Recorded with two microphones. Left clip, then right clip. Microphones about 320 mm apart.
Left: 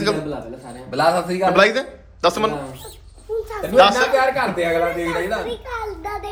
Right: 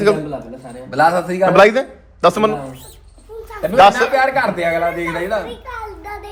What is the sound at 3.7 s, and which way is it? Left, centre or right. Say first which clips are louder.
Speech: right 3 dB; centre.